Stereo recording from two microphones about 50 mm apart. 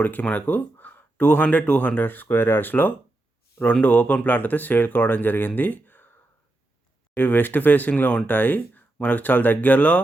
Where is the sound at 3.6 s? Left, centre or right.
Left.